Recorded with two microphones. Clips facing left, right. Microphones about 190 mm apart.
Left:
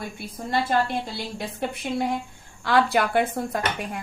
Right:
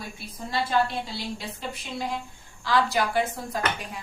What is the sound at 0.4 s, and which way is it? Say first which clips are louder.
A woman's voice: left 2 dB; 55° left (ahead or behind).